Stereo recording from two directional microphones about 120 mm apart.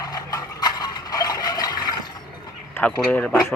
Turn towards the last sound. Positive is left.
turn(degrees=15)  # may be behind; listen again after turning